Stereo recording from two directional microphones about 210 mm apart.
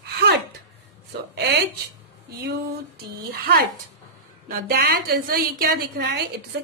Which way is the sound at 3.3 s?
45° right (ahead or behind).